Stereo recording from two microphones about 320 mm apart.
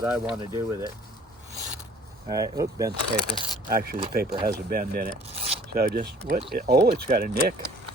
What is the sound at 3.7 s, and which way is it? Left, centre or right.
Speech, right.